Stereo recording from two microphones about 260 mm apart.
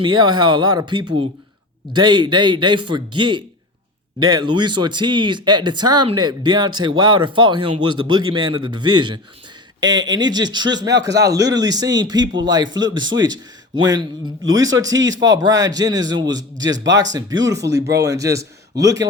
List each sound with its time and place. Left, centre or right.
0.0 s speech: centre